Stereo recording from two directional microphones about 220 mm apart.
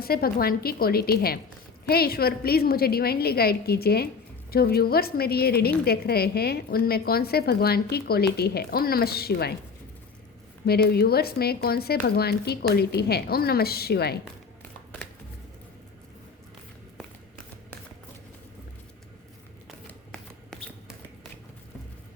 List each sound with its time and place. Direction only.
0.0 s a woman's voice: 45° left (ahead or behind)
10.7 s a woman's voice: 45° left (ahead or behind)
19.9 s a sound: 5° left (ahead or behind)